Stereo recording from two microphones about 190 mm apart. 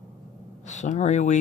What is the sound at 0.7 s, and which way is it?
Speech, 35° left (ahead or behind).